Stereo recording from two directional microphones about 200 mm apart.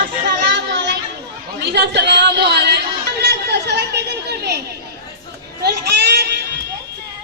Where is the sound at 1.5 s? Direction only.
55° right (ahead or behind).